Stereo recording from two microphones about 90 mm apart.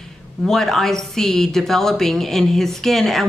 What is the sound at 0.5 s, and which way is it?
A woman's voice, 5° left (ahead or behind).